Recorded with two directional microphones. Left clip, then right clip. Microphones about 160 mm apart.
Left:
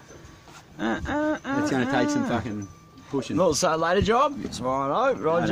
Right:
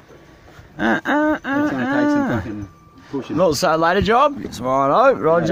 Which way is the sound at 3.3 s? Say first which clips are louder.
Right 6 dB; 15° right (ahead or behind).